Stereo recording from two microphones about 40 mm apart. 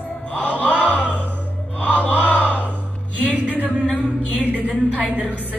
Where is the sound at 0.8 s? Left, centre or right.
Left.